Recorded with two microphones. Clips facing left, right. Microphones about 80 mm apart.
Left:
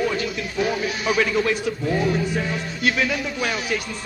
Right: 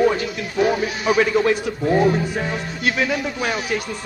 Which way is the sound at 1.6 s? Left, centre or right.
Right.